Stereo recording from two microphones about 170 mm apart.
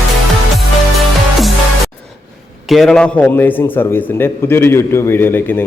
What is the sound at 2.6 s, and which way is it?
A man's voice, centre (ahead or behind).